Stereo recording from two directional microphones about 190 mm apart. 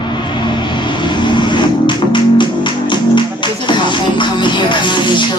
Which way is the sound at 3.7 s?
25° left (ahead or behind).